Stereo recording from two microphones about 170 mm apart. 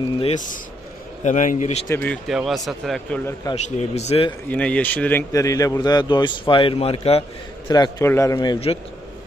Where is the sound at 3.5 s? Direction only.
40° left (ahead or behind).